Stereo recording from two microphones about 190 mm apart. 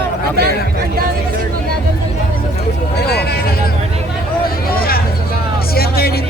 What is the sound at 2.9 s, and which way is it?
Speech, 55° left (ahead or behind).